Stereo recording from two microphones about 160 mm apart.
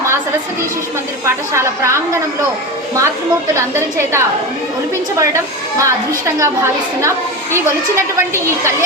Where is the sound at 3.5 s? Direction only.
15° right (ahead or behind).